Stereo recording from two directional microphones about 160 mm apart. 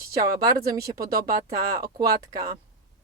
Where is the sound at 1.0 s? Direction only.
70° right (ahead or behind).